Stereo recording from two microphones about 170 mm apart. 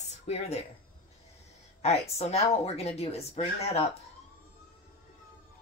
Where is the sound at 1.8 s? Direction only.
35° left (ahead or behind).